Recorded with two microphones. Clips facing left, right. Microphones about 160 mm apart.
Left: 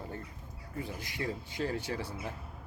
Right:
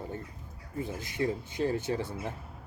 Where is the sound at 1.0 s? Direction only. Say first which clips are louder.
Right 9 dB; 20° right (ahead or behind).